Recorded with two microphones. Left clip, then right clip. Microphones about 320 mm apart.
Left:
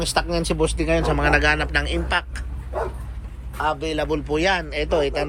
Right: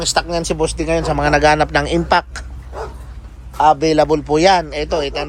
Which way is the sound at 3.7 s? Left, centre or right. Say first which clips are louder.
Right 12 dB; right.